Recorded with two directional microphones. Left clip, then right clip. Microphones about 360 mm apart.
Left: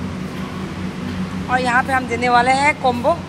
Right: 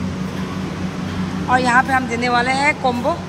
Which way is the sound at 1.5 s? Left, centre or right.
Centre.